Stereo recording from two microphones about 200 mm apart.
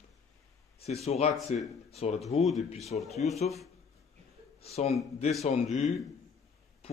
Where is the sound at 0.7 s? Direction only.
30° left (ahead or behind).